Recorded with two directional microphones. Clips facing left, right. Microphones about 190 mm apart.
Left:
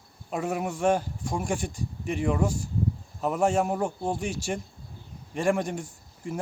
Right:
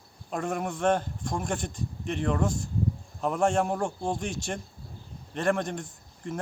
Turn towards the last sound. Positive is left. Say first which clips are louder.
# left 1 dB
turn(degrees=10)  # may be behind; listen again after turning